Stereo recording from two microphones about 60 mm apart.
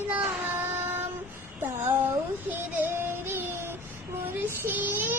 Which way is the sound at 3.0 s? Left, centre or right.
Right.